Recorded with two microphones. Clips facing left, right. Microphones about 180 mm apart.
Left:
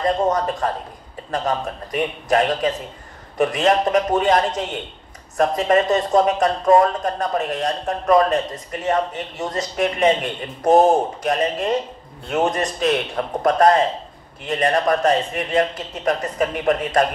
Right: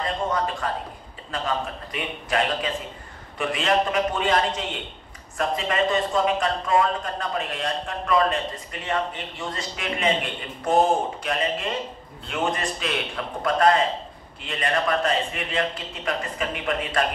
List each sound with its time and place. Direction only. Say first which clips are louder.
0.6 s a man's voice: left 5 dB; 45° left (ahead or behind)